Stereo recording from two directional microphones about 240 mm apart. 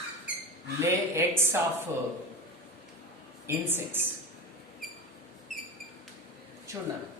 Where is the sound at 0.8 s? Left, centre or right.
Centre.